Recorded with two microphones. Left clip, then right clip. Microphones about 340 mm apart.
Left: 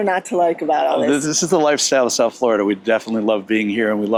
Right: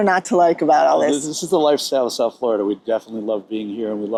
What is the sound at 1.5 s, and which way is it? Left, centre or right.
Speech, left.